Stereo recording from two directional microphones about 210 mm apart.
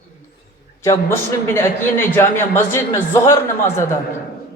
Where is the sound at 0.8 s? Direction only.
10° left (ahead or behind).